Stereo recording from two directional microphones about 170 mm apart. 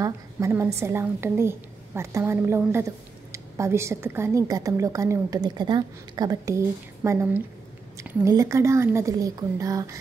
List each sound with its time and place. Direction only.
0.0 s a woman's voice: 15° right (ahead or behind)